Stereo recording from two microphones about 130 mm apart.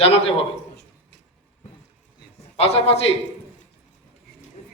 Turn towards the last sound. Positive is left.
turn(degrees=50)  # may be behind; listen again after turning